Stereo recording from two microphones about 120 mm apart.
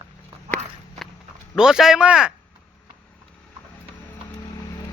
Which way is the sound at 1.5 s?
5° right (ahead or behind).